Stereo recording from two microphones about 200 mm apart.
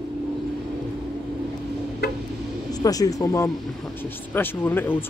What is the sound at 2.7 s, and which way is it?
Speech, 20° left (ahead or behind).